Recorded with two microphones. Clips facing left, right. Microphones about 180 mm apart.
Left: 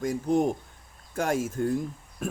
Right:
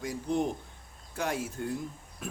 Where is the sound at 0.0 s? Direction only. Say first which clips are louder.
Left 6 dB; 45° left (ahead or behind).